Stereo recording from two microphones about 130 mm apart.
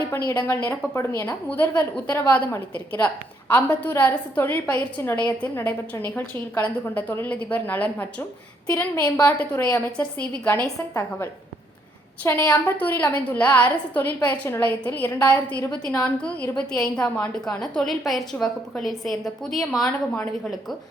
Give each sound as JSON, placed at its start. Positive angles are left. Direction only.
{"t": 0.3, "sound": "a woman's voice", "side_deg": 15}
{"t": 10.8, "sound": "a woman's voice", "side_deg": 25}